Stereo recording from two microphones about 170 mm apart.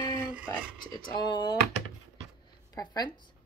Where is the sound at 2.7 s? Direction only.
25° left (ahead or behind).